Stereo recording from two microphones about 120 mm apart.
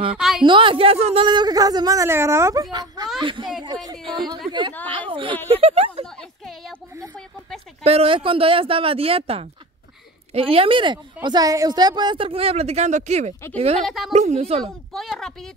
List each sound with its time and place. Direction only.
0.1 s speech: 5° right (ahead or behind)
0.4 s speech: 45° right (ahead or behind)
1.2 s a woman's voice: 40° right (ahead or behind)
5.6 s speech: 60° right (ahead or behind)
7.8 s speech: 55° right (ahead or behind)
11.2 s speech: 30° right (ahead or behind); by 13.3 s 75° right (ahead or behind)
13.8 s speech: centre (ahead or behind)
14.1 s speech: 65° right (ahead or behind)
14.6 s speech: 5° left (ahead or behind)